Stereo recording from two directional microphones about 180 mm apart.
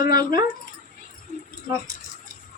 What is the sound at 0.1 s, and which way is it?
Speech, 20° right (ahead or behind).